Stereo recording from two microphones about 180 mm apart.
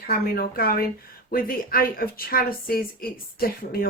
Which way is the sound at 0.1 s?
55° left (ahead or behind).